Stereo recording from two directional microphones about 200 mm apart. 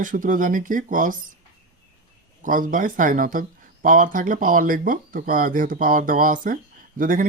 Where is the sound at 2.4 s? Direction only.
40° right (ahead or behind).